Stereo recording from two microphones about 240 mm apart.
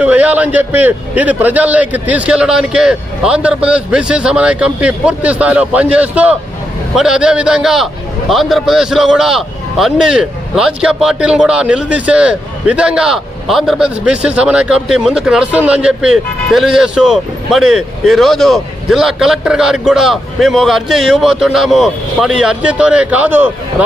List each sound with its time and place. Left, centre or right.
0.0 s speech: centre